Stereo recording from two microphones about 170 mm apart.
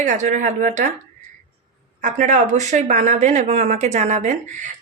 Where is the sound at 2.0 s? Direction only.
45° right (ahead or behind).